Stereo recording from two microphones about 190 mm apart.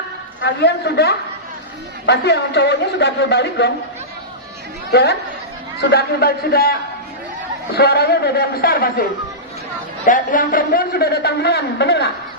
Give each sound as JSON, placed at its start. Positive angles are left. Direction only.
{"t": 0.4, "sound": "a man's voice", "side_deg": 60}
{"t": 4.9, "sound": "a woman's voice", "side_deg": 60}
{"t": 7.8, "sound": "a man's voice", "side_deg": 55}
{"t": 10.1, "sound": "a man's voice", "side_deg": 45}